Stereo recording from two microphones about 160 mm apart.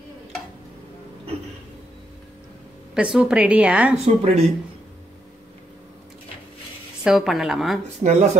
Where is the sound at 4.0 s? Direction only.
40° right (ahead or behind).